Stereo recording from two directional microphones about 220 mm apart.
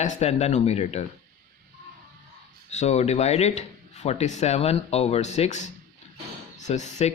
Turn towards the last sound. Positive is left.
turn(degrees=30)  # may be behind; listen again after turning